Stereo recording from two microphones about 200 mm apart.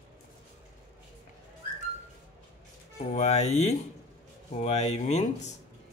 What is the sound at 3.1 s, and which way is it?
Speech, 35° left (ahead or behind).